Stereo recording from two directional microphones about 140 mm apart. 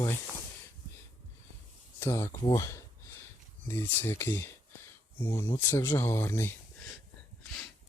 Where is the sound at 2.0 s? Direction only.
20° left (ahead or behind).